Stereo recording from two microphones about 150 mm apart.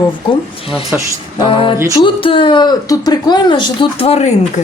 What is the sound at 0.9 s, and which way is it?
Speech, 10° right (ahead or behind).